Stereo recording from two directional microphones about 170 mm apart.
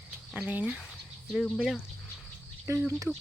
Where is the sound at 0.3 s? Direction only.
10° right (ahead or behind).